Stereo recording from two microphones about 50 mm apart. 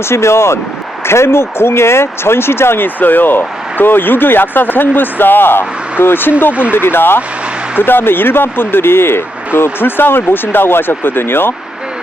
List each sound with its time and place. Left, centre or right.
0.1 s speech: left
6.5 s speech: right
6.7 s speech: left